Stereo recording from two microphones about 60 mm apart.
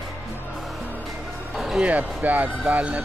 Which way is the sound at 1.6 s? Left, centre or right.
Centre.